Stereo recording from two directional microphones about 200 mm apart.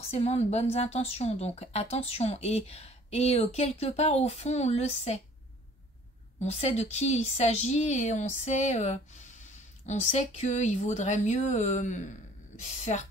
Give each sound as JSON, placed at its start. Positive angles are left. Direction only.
{"t": 0.1, "sound": "speech", "side_deg": 30}
{"t": 6.4, "sound": "speech", "side_deg": 35}